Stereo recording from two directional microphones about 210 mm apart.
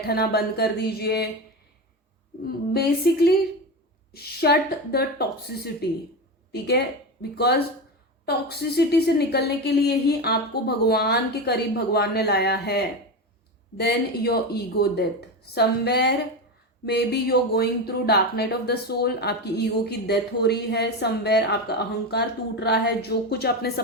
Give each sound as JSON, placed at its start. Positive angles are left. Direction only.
{"t": 0.0, "sound": "speech", "side_deg": 50}
{"t": 2.5, "sound": "speech", "side_deg": 50}